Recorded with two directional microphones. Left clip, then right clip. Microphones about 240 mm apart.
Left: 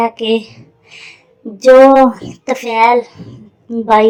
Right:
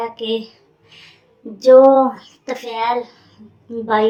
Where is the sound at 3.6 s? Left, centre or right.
Left.